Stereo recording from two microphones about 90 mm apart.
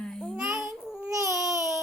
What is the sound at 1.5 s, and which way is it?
Baby cry, 35° right (ahead or behind).